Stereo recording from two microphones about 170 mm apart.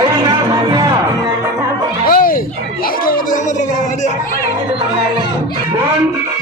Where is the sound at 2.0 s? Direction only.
55° left (ahead or behind).